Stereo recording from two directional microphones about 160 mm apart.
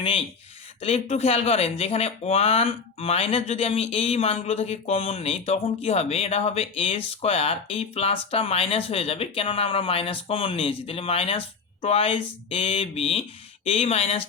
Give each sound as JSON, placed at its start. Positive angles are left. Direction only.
{"t": 0.0, "sound": "speech", "side_deg": 35}